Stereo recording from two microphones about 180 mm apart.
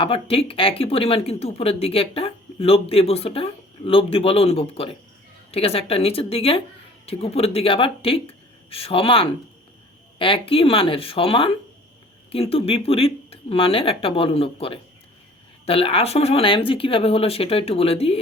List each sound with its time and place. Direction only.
0.0 s speech: 30° left (ahead or behind)